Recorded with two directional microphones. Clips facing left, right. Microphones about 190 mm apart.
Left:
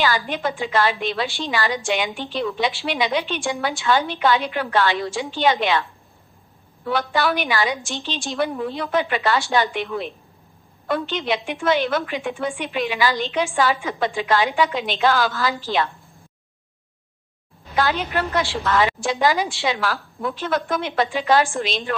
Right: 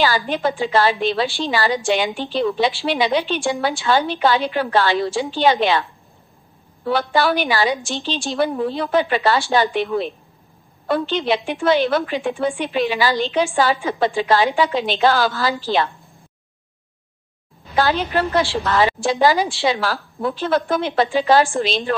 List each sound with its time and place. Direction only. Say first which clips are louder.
0.0 s a woman's voice: right 3 dB; 30° right (ahead or behind)
17.7 s a woman's voice: right 3 dB; 35° right (ahead or behind)